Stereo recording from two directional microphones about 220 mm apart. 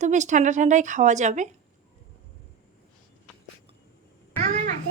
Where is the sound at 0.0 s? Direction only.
35° right (ahead or behind).